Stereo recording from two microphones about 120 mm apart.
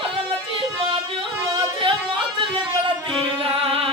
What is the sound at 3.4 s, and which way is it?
Music, 50° right (ahead or behind).